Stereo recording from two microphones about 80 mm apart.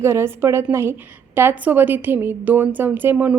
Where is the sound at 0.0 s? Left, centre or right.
Right.